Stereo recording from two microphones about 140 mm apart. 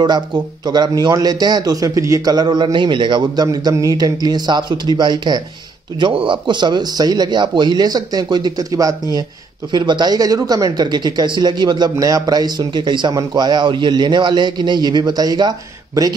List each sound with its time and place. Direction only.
0.0 s speech: 30° right (ahead or behind)